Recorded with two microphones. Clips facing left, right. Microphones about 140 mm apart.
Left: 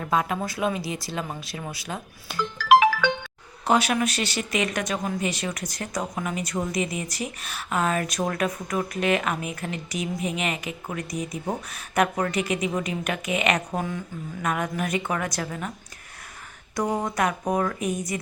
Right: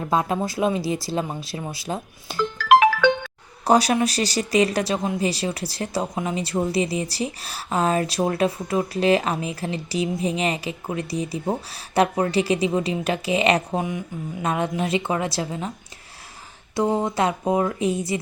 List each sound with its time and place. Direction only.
0.0 s speech: 30° right (ahead or behind)
2.3 s music: centre (ahead or behind)
3.6 s speech: 35° right (ahead or behind)
13.7 s speech: 15° right (ahead or behind)
14.4 s speech: 25° right (ahead or behind)
16.7 s speech: 25° right (ahead or behind)